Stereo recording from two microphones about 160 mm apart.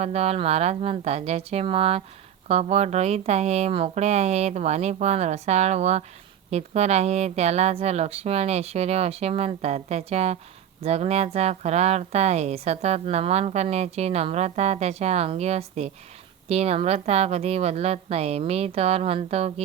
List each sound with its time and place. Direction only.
0.0 s a woman's voice: 40° right (ahead or behind)